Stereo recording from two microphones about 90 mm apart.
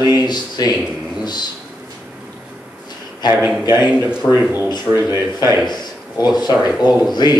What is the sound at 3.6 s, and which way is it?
Speech, 50° left (ahead or behind).